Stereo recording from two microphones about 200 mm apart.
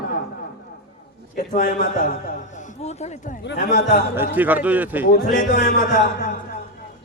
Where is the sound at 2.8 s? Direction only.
35° left (ahead or behind).